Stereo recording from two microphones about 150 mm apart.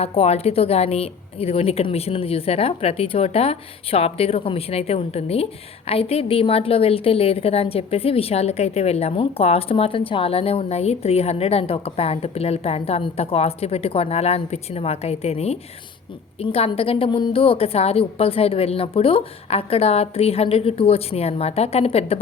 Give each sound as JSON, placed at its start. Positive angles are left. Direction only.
{"t": 0.0, "sound": "a woman's voice", "side_deg": 45}